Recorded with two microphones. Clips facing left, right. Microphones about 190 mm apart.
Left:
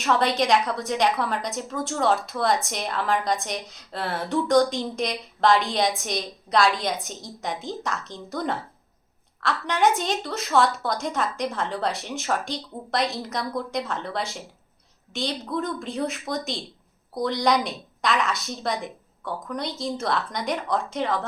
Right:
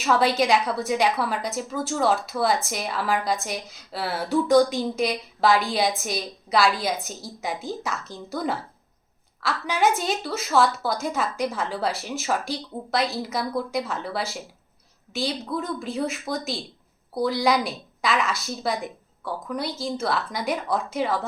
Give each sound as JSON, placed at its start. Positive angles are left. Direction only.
{"t": 0.0, "sound": "a woman's voice", "side_deg": -5}